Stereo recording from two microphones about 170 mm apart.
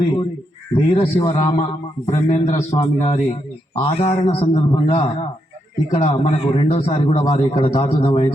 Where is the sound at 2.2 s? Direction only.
40° left (ahead or behind).